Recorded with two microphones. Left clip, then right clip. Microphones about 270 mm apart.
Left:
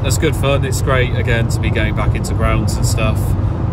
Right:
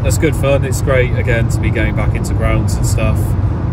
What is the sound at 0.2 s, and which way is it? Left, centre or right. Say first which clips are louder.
Speech: right 3 dB; left.